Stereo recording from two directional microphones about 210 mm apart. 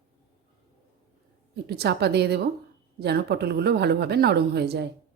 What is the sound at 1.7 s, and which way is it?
A woman's voice, 50° right (ahead or behind).